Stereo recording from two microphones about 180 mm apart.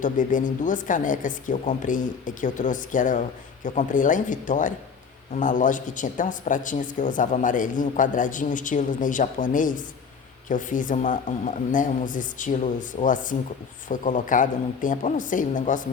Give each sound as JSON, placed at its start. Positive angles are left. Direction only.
{"t": 0.0, "sound": "speech", "side_deg": 45}